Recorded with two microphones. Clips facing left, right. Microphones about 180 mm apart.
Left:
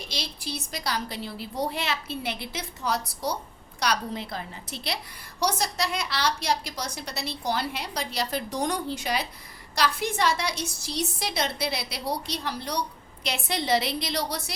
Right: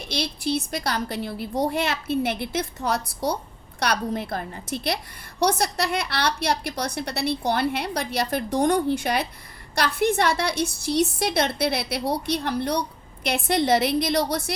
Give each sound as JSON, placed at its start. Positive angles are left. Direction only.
{"t": 0.1, "sound": "a woman's voice", "side_deg": -55}